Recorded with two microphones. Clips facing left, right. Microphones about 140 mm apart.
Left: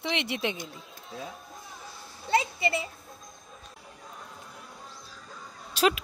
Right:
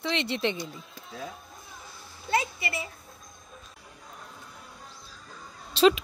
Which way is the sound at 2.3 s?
25° left (ahead or behind).